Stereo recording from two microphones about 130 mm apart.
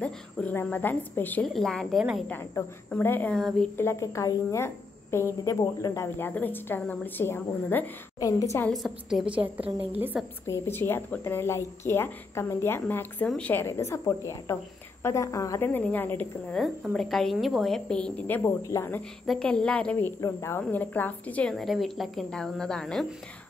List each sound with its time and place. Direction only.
0.0 s a woman's voice: 10° left (ahead or behind)
1.4 s speech: 5° left (ahead or behind)
2.2 s a woman's voice: 10° left (ahead or behind)
3.3 s speech: 5° left (ahead or behind)
3.7 s a woman's voice: 20° left (ahead or behind)
8.2 s a woman's voice: 25° left (ahead or behind)
8.6 s a woman's voice: centre (ahead or behind)
10.4 s a woman's voice: 20° left (ahead or behind)
16.9 s a woman's voice: 5° left (ahead or behind); by 19.0 s 20° left (ahead or behind)
19.2 s a woman's voice: 5° left (ahead or behind)
20.2 s speech: 25° left (ahead or behind); by 23.0 s 5° left (ahead or behind)